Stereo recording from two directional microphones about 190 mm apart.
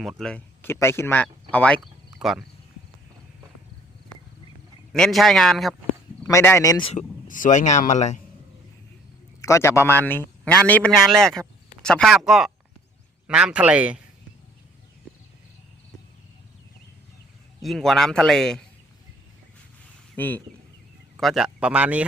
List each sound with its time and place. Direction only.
0.0 s speech: centre (ahead or behind)
2.1 s cricket: centre (ahead or behind)
4.9 s a man's voice: centre (ahead or behind)
6.2 s speech: 15° left (ahead or behind)
6.9 s speech: 45° left (ahead or behind)
9.4 s a man's voice: 15° left (ahead or behind); by 14.0 s 5° right (ahead or behind)
17.6 s a man's voice: centre (ahead or behind)
20.1 s speech: 10° left (ahead or behind)
21.2 s a man's voice: centre (ahead or behind)